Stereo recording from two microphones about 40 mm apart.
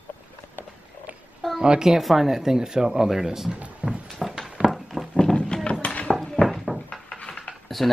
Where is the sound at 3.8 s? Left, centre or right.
Right.